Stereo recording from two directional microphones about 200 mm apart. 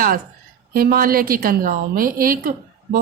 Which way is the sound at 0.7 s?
45° right (ahead or behind).